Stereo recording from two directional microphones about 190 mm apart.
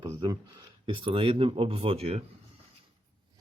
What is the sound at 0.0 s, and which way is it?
Speech, 25° right (ahead or behind).